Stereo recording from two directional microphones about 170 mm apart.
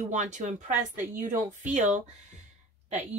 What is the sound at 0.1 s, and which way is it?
Speech, 45° right (ahead or behind).